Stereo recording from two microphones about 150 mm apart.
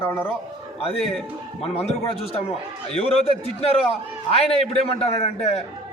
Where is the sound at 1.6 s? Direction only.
45° left (ahead or behind).